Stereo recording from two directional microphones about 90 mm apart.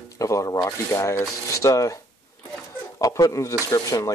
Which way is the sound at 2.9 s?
40° left (ahead or behind).